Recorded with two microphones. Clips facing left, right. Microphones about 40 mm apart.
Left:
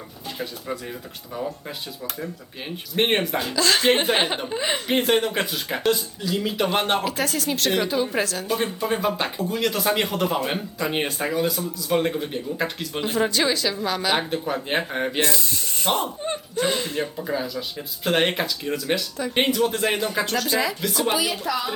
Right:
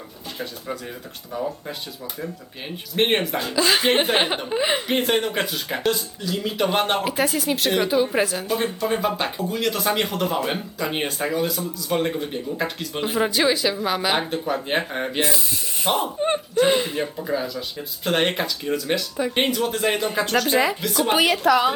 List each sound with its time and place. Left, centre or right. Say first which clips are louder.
0.3 s speech: even; centre
3.5 s speech: right 1 dB; centre
4.9 s speech: left 1 dB; centre
7.0 s speech: right 2 dB; centre
8.4 s speech: right 1 dB; centre
13.0 s speech: right 1 dB; centre
14.2 s speech: right 1 dB; centre
21.1 s a woman's voice: right 10 dB; right